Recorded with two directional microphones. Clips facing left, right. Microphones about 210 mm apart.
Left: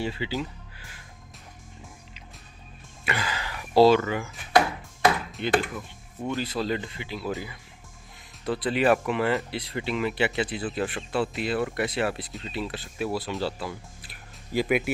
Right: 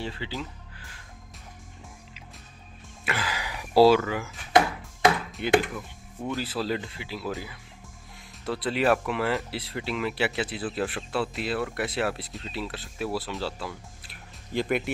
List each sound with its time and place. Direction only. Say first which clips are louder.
0.0 s speech: left 4 dB; 10° left (ahead or behind)
3.1 s a sound: left 1 dB; 5° right (ahead or behind)
4.5 s ping: even; 20° right (ahead or behind)
5.4 s speech: right 3 dB; 10° right (ahead or behind)